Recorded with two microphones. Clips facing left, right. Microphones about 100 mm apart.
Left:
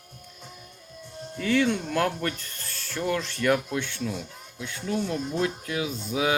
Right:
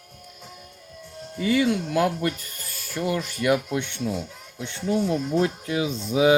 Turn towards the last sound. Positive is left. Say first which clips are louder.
# right 6 dB
turn(degrees=-20)  # may be behind; listen again after turning